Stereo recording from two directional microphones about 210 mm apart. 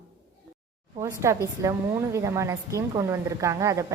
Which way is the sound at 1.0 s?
15° right (ahead or behind).